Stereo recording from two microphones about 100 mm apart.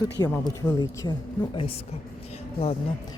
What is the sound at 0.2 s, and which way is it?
Speech, 45° left (ahead or behind).